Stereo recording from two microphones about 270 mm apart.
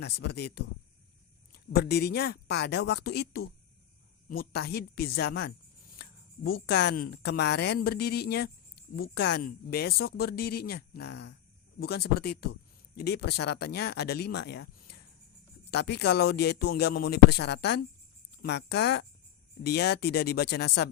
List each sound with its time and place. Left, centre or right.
0.0 s speech: left